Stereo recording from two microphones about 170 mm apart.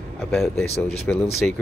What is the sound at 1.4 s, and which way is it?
Speech, 5° left (ahead or behind).